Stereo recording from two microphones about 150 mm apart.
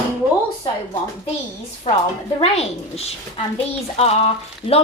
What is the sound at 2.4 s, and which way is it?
A woman's voice, 45° left (ahead or behind).